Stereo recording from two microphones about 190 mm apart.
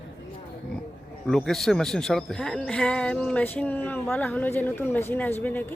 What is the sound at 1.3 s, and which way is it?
Speech, centre (ahead or behind).